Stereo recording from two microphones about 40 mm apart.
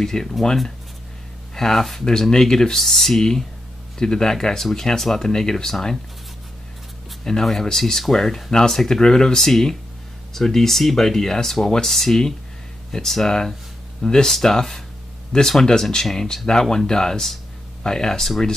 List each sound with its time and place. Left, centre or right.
0.0 s speech: centre
1.5 s speech: centre
7.2 s speech: centre